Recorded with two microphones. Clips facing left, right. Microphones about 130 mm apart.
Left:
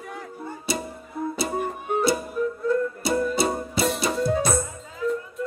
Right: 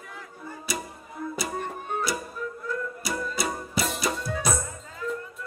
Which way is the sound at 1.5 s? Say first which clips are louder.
Left 5 dB; 10° left (ahead or behind).